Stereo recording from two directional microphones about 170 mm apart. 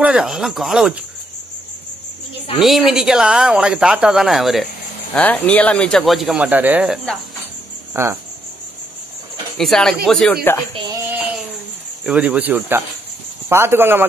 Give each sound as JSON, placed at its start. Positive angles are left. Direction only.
{"t": 0.0, "sound": "speech", "side_deg": -5}
{"t": 2.6, "sound": "speech", "side_deg": 0}
{"t": 5.1, "sound": "speech", "side_deg": 10}
{"t": 7.9, "sound": "speech", "side_deg": -15}
{"t": 9.6, "sound": "speech", "side_deg": 0}
{"t": 10.9, "sound": "a sound", "side_deg": -10}
{"t": 12.0, "sound": "speech", "side_deg": -5}